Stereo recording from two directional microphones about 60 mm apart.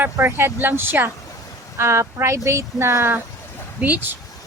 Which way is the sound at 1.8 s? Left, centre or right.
Right.